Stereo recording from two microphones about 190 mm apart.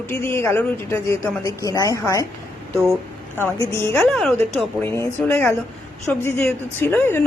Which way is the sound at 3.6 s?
15° left (ahead or behind).